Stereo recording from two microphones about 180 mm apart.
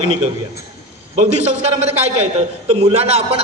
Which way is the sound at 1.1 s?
40° right (ahead or behind).